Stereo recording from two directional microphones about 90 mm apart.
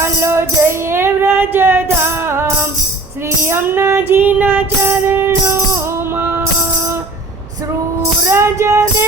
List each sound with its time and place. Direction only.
0.0 s music: 30° right (ahead or behind)
8.3 s music: 35° right (ahead or behind)